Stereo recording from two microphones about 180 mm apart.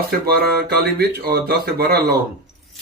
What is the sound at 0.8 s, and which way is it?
Speech, 60° right (ahead or behind).